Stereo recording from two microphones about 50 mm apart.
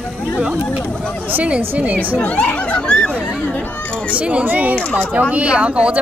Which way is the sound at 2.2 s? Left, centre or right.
Left.